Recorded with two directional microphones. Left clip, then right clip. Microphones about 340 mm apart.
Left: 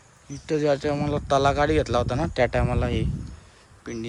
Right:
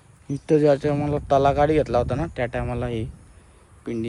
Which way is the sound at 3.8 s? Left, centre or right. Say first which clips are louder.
Right 5 dB; centre.